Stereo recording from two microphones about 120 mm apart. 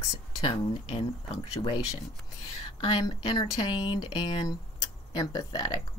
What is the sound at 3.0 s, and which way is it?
Speech, 35° left (ahead or behind).